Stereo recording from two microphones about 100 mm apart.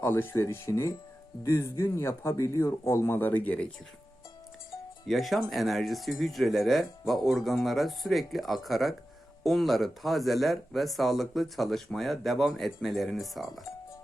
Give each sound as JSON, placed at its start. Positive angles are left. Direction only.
{"t": 0.0, "sound": "speech", "side_deg": 25}
{"t": 5.0, "sound": "speech", "side_deg": 0}